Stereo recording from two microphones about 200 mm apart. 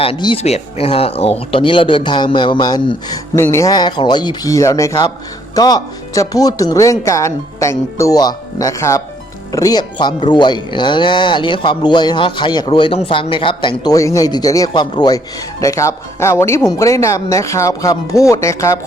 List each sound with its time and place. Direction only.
0.0 s speech: 25° left (ahead or behind)